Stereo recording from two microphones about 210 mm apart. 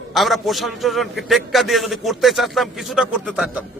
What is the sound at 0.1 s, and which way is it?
A man's voice, centre (ahead or behind).